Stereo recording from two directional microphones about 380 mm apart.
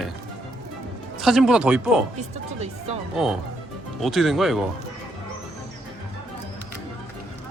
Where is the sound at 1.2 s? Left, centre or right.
Centre.